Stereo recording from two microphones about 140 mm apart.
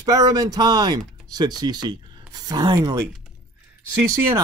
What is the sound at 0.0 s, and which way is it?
Speech, 25° right (ahead or behind).